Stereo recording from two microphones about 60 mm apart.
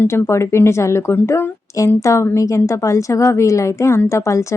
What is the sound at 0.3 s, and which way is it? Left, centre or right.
A woman's voice, left.